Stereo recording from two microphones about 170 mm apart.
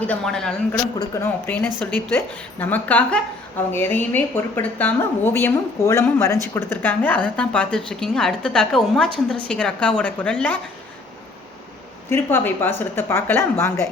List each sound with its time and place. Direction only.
0.0 s a woman's voice: 5° left (ahead or behind)
0.9 s a woman's voice: 15° left (ahead or behind)
12.1 s a woman's voice: 15° left (ahead or behind)